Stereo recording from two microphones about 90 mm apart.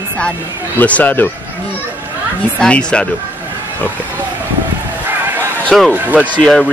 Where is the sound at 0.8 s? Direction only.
20° left (ahead or behind).